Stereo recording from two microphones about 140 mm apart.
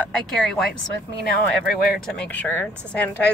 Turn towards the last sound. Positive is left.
turn(degrees=10)  # may be behind; listen again after turning